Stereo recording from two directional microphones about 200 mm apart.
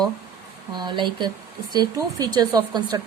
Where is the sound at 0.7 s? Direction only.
20° right (ahead or behind).